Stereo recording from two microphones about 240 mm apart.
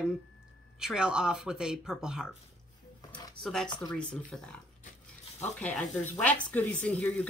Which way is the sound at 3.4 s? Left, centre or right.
Centre.